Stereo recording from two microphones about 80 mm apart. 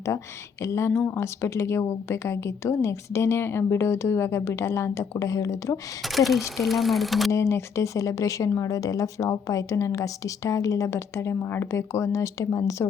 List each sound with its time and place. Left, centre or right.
0.6 s speech: left
6.0 s speech: centre
7.3 s speech: left